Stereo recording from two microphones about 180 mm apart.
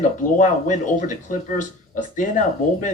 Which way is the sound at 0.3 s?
45° left (ahead or behind).